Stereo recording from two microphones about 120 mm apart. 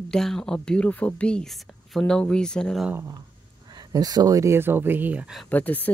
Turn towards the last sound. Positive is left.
turn(degrees=15)  # may be behind; listen again after turning